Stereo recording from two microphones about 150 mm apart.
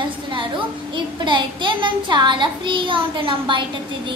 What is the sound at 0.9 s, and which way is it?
A child's voice, 30° right (ahead or behind).